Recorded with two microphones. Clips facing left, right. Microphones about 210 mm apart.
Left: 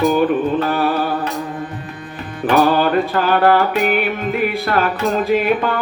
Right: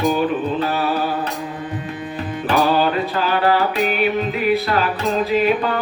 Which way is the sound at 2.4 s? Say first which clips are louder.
Left 3 dB; 50° left (ahead or behind).